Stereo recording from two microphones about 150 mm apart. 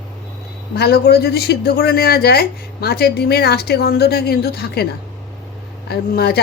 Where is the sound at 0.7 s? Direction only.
90° left.